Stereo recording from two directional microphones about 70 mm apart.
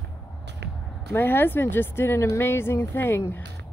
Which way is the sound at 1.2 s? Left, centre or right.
Left.